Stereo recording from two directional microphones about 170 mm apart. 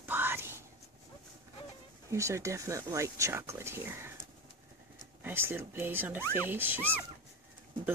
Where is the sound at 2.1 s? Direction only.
15° right (ahead or behind).